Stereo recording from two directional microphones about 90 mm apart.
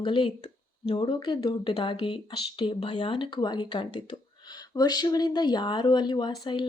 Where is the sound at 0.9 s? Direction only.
55° left (ahead or behind).